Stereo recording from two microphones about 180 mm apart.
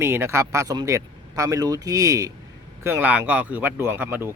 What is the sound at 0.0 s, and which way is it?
Speech, 15° right (ahead or behind).